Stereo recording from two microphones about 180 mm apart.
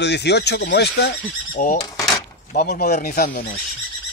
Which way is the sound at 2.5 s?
60° left (ahead or behind).